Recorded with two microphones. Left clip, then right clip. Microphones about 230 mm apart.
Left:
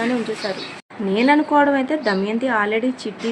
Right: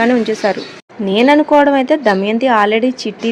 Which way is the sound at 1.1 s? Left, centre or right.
Right.